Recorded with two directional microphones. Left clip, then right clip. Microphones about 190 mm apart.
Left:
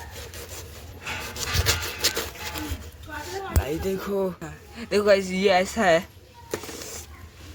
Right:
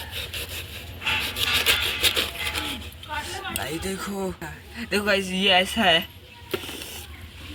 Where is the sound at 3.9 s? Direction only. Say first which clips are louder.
Left 4 dB; 25° left (ahead or behind).